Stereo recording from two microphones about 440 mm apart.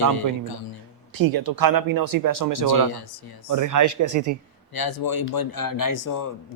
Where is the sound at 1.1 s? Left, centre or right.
Right.